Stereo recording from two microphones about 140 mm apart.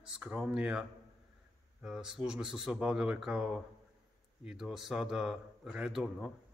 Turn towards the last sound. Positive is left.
turn(degrees=-5)  # may be behind; listen again after turning